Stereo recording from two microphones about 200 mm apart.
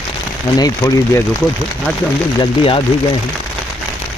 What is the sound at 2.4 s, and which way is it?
Speech, 25° left (ahead or behind).